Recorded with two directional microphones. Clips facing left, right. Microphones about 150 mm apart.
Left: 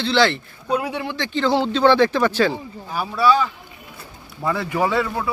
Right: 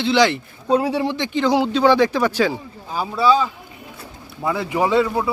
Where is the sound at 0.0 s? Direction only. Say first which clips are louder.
Right 2 dB; 15° right (ahead or behind).